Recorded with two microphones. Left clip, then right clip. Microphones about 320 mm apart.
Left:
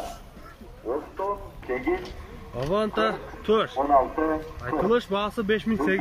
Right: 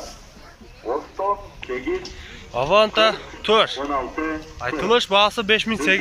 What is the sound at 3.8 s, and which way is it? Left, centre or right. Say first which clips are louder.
Speech: left 4 dB; left.